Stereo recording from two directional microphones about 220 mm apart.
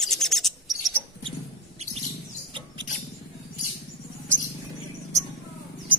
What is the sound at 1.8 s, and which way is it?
Chirp, 30° right (ahead or behind).